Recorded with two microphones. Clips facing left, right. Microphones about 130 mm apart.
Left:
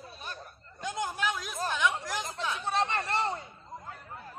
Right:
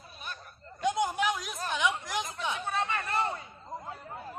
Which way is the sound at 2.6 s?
30° left (ahead or behind).